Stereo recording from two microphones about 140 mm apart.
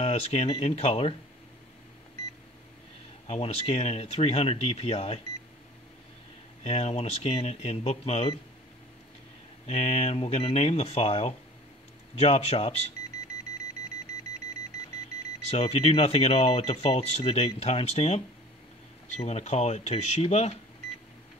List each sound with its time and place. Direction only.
0.0 s speech: 45° left (ahead or behind)
3.3 s speech: 45° left (ahead or behind)
6.6 s speech: 50° left (ahead or behind)
9.7 s speech: 50° left (ahead or behind)
15.5 s speech: 45° left (ahead or behind)